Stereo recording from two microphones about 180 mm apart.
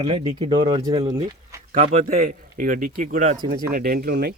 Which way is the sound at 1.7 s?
45° right (ahead or behind).